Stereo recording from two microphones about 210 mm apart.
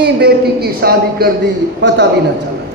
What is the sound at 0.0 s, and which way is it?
Speech, 50° right (ahead or behind).